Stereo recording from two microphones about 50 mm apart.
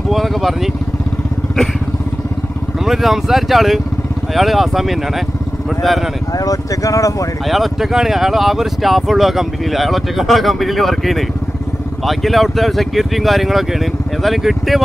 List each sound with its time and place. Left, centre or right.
0.1 s vehicle: centre
2.8 s speech: centre
6.9 s speech: left
7.4 s speech: centre